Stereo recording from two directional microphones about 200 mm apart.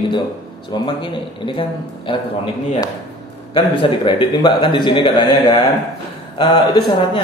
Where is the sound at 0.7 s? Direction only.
25° left (ahead or behind).